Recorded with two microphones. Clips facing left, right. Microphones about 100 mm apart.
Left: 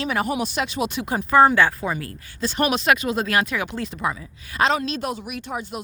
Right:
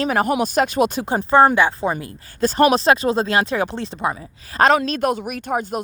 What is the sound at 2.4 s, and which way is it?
Speech, 45° right (ahead or behind).